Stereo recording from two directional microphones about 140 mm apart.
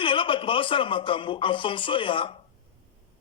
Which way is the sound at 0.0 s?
35° left (ahead or behind).